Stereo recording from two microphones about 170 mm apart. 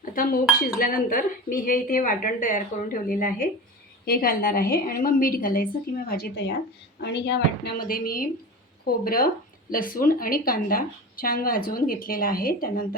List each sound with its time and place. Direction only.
0.0 s dishes: 55° left (ahead or behind)
0.8 s a woman's voice: 55° left (ahead or behind)